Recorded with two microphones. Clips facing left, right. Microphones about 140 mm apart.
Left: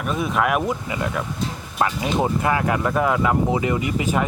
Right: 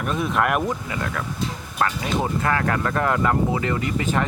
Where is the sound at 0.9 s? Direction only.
15° left (ahead or behind).